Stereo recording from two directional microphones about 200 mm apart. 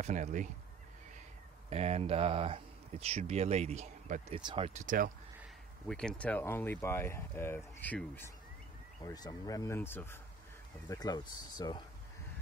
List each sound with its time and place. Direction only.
0.0 s speech: 35° right (ahead or behind)
1.7 s speech: 30° right (ahead or behind)
5.9 s speech: 5° left (ahead or behind); by 11.8 s 20° left (ahead or behind)